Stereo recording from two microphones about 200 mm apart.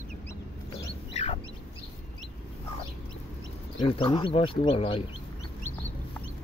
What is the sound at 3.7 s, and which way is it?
Speech, 25° left (ahead or behind).